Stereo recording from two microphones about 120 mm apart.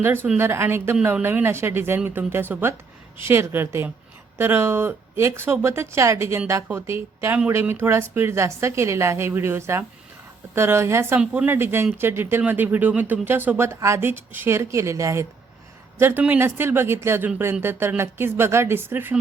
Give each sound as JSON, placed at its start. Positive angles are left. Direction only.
{"t": 0.3, "sound": "speech", "side_deg": -20}
{"t": 11.2, "sound": "speech", "side_deg": -10}
{"t": 11.5, "sound": "speech", "side_deg": -20}